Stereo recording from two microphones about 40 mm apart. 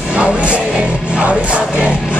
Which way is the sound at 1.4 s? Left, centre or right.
Right.